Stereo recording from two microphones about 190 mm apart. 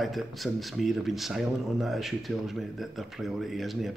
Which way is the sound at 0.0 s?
Centre (ahead or behind).